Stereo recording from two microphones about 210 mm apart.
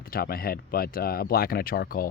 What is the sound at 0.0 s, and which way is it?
Speech, 45° left (ahead or behind).